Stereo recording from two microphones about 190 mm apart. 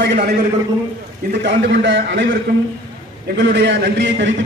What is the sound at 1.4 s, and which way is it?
Speech, 70° right (ahead or behind).